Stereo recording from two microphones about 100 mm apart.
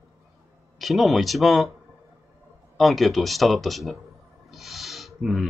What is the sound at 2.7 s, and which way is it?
Speech, centre (ahead or behind).